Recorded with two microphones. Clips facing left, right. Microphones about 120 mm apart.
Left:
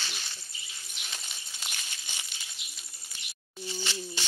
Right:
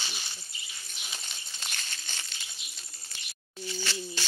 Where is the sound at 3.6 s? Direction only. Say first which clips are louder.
Right 1 dB; 20° left (ahead or behind).